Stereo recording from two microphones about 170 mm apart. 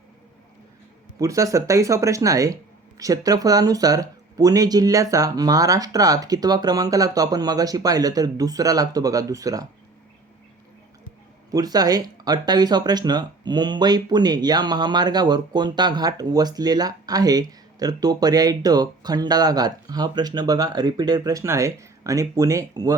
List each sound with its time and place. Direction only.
1.2 s speech: 20° right (ahead or behind)
11.5 s speech: 20° right (ahead or behind)